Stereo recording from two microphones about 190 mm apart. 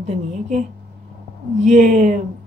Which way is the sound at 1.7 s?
40° right (ahead or behind).